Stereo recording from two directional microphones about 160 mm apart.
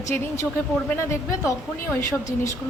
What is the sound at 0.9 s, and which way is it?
A woman's voice, 15° left (ahead or behind).